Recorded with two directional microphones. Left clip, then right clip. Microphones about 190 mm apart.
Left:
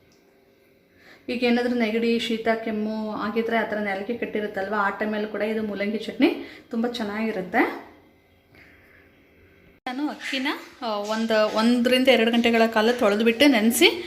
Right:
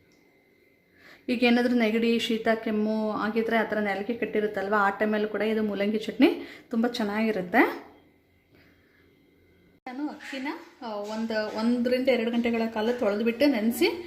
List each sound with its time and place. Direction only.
1.0 s a woman's voice: 30° right (ahead or behind)
9.8 s a sound: 5° left (ahead or behind)
11.3 s speech: 5° left (ahead or behind)